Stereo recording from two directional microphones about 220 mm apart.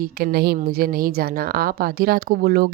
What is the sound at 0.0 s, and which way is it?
A woman's voice, 45° right (ahead or behind).